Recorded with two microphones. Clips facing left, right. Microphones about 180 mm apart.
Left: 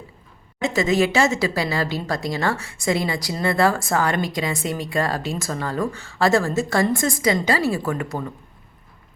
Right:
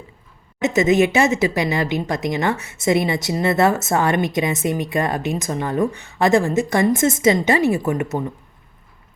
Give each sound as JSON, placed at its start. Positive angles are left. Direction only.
{"t": 0.6, "sound": "speech", "side_deg": -20}